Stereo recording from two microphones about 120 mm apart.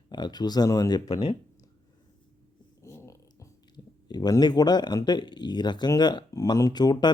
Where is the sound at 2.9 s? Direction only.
25° left (ahead or behind).